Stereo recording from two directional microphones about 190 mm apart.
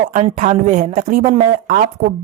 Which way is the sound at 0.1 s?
40° right (ahead or behind).